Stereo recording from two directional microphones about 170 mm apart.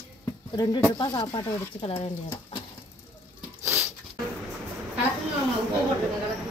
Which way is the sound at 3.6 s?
15° right (ahead or behind).